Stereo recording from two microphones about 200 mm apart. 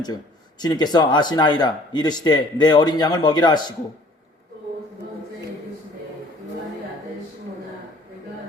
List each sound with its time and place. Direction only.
0.6 s speech: 20° left (ahead or behind)